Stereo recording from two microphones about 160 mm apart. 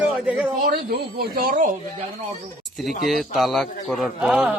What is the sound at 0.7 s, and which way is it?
Speech, 70° right (ahead or behind).